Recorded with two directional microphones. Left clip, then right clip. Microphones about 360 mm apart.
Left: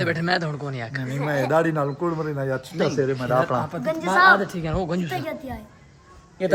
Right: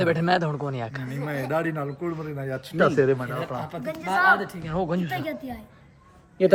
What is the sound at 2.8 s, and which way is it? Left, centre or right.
Speech, centre.